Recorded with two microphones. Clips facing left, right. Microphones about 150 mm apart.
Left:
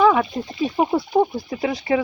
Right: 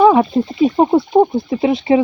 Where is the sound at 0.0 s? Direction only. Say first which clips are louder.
Right 6 dB; 30° right (ahead or behind).